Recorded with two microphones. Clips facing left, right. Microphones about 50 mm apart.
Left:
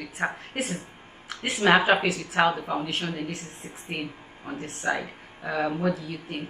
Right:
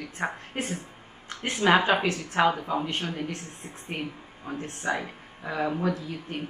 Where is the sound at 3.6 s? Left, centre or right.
Left.